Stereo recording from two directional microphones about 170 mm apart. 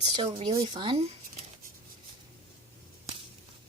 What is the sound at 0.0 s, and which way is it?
Speech, 35° right (ahead or behind).